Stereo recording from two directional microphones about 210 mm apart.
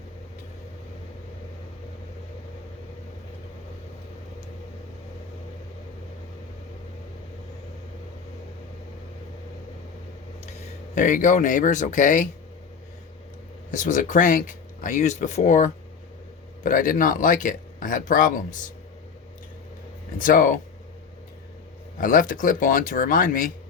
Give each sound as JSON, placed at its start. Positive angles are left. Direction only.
{"t": 10.9, "sound": "speech", "side_deg": 40}
{"t": 13.7, "sound": "speech", "side_deg": 40}
{"t": 20.1, "sound": "speech", "side_deg": 40}
{"t": 21.9, "sound": "speech", "side_deg": 40}